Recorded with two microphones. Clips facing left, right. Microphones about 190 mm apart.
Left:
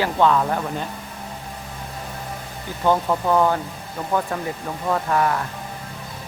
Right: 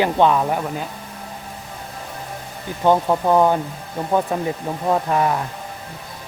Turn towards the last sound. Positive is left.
turn(degrees=-20)  # may be behind; listen again after turning